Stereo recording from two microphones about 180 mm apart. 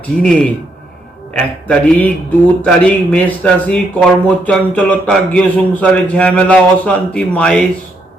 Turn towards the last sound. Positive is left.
turn(degrees=5)  # may be behind; listen again after turning